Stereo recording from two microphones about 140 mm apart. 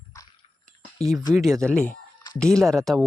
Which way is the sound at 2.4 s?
5° left (ahead or behind).